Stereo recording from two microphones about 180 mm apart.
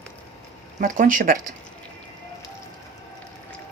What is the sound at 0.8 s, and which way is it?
Speech, 45° right (ahead or behind).